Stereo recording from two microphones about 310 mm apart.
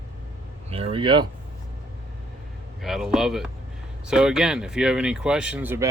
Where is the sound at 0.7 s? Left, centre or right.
Centre.